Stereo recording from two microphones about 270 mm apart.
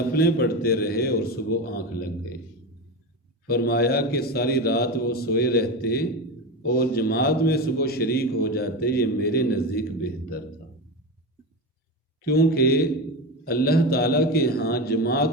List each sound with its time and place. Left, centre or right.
0.1 s a man's voice: left
3.4 s a man's voice: left
12.2 s a man's voice: left